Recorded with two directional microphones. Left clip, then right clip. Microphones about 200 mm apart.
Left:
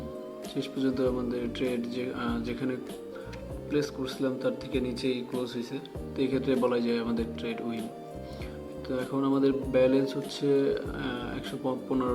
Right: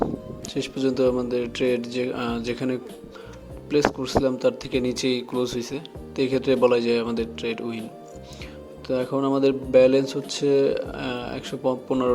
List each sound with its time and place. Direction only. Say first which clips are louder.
0.5 s a man's voice: right 6 dB; 40° right (ahead or behind)
8.9 s speech: right 6 dB; 35° right (ahead or behind)